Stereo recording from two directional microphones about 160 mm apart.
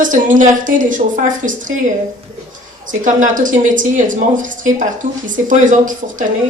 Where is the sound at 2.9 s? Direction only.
55° right (ahead or behind).